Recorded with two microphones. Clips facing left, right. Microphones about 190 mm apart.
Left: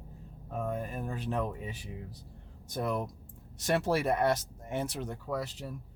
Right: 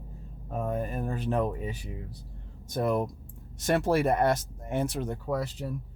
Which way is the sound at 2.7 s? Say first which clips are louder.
Right 6 dB; 50° right (ahead or behind).